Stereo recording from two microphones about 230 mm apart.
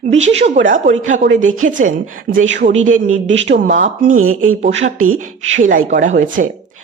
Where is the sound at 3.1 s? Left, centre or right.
Right.